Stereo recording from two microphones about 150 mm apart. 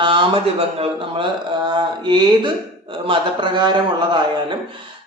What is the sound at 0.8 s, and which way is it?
Speech, 35° right (ahead or behind).